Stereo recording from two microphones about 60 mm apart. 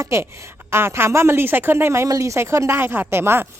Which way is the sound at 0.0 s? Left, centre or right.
Right.